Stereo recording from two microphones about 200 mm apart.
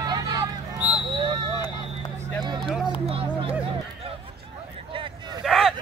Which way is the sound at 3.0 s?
30° right (ahead or behind).